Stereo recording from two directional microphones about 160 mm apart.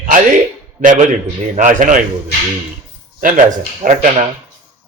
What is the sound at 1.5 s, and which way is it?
Speech, 55° right (ahead or behind).